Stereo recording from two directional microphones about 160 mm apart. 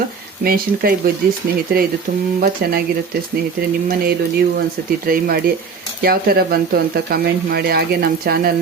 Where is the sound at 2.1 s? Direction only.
80° right.